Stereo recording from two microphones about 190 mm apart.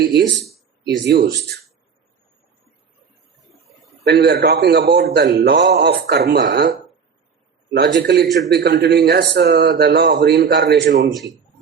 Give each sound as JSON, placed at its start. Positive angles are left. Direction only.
{"t": 1.0, "sound": "a man's voice", "side_deg": -60}
{"t": 4.0, "sound": "a man's voice", "side_deg": -60}
{"t": 7.7, "sound": "a man's voice", "side_deg": -70}